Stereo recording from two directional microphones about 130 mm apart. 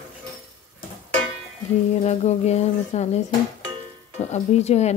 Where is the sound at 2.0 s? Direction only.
55° left (ahead or behind).